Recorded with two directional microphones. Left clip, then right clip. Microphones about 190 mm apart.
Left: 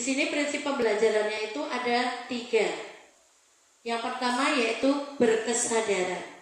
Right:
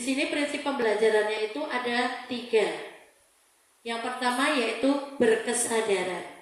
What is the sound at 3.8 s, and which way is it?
Speech, 30° right (ahead or behind).